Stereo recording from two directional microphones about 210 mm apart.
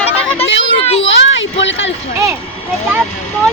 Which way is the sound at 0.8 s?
30° left (ahead or behind).